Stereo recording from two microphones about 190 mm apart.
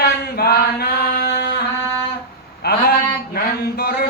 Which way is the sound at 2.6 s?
55° left (ahead or behind).